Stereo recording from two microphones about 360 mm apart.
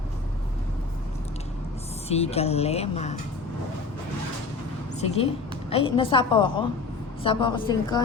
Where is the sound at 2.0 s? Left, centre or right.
Centre.